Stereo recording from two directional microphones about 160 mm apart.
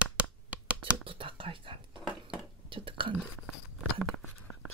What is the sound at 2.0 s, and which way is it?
Dishes, 5° right (ahead or behind).